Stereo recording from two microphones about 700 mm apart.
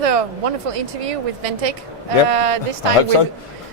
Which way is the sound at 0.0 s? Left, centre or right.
Right.